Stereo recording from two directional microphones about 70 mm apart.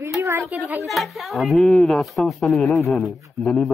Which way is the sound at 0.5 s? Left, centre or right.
Right.